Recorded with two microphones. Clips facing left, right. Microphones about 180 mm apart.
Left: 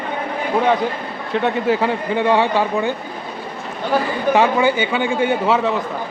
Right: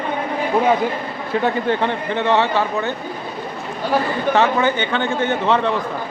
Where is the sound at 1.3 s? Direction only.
Centre (ahead or behind).